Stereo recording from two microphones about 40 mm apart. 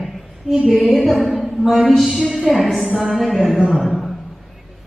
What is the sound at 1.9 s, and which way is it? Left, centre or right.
A man's voice, centre.